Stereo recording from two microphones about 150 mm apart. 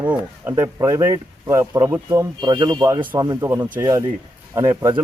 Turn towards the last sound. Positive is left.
turn(degrees=-20)  # may be behind; listen again after turning